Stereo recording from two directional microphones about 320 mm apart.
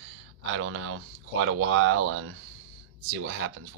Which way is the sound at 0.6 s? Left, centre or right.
Right.